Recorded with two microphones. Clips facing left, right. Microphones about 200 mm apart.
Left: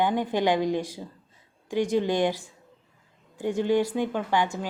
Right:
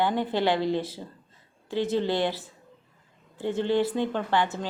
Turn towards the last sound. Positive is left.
turn(degrees=10)  # may be behind; listen again after turning